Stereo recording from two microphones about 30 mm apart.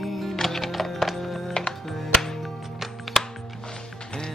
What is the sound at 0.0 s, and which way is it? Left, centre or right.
Music, centre.